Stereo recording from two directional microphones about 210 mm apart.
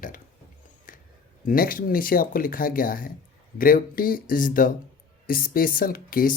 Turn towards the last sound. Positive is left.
turn(degrees=45)  # may be behind; listen again after turning